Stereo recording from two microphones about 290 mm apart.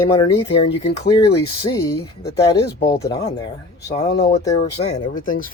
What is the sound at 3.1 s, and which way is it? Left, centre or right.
Speech, centre.